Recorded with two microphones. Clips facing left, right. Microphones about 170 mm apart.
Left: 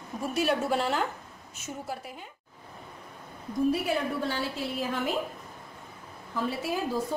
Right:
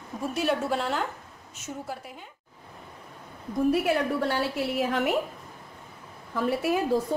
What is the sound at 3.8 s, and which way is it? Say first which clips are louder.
A woman's voice: right 4 dB; 70° right (ahead or behind).